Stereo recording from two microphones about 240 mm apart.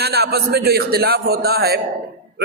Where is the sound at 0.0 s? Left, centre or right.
Right.